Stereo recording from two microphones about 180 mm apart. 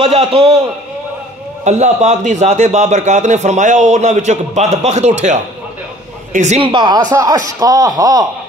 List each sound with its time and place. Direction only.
0.0 s a man's voice: 30° right (ahead or behind)
1.6 s a man's voice: 40° right (ahead or behind)
6.3 s speech: 40° right (ahead or behind); by 8.3 s 20° right (ahead or behind)